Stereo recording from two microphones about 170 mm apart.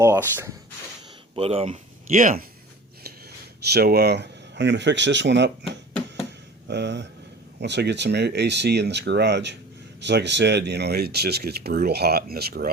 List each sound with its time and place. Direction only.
0.0 s speech: 15° right (ahead or behind)
1.4 s speech: 35° right (ahead or behind)
3.0 s speech: 70° right (ahead or behind)